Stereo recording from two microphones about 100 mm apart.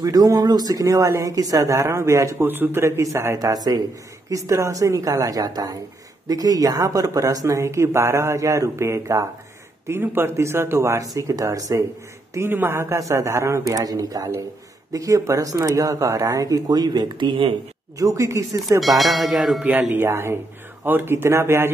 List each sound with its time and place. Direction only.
0.0 s speech: 40° right (ahead or behind)
2.4 s speech: 20° right (ahead or behind)
12.4 s speech: 25° right (ahead or behind); by 17.6 s 55° right (ahead or behind)
17.9 s speech: 30° right (ahead or behind)
18.8 s speech: centre (ahead or behind)
19.9 s speech: 25° right (ahead or behind)